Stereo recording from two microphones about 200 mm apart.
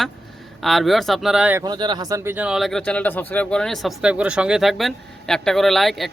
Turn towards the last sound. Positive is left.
turn(degrees=0)  # may be behind; listen again after turning